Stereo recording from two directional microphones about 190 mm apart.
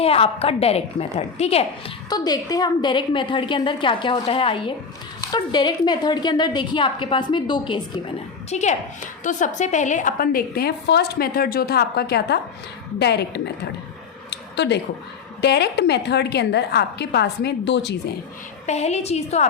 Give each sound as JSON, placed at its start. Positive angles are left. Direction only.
{"t": 0.0, "sound": "a woman's voice", "side_deg": 30}
{"t": 2.0, "sound": "a woman's voice", "side_deg": 20}
{"t": 8.4, "sound": "a woman's voice", "side_deg": 35}
{"t": 14.3, "sound": "a sound", "side_deg": 65}
{"t": 15.4, "sound": "a woman's voice", "side_deg": 60}
{"t": 18.6, "sound": "a woman's voice", "side_deg": 35}